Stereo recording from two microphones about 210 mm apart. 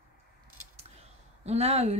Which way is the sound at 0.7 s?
30° right (ahead or behind).